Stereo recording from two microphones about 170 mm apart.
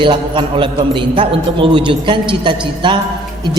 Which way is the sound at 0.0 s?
30° right (ahead or behind).